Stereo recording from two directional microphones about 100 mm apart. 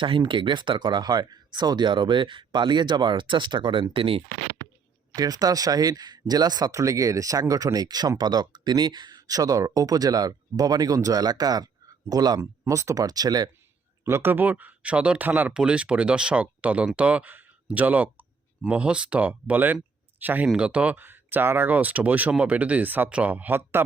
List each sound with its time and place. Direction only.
0.0 s speech: 55° right (ahead or behind)
5.1 s speech: 40° right (ahead or behind)
14.0 s speech: 25° right (ahead or behind)